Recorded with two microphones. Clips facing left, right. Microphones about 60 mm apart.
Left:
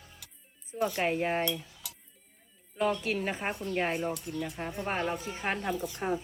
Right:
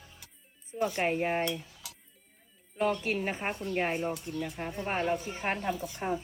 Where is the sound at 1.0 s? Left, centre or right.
Right.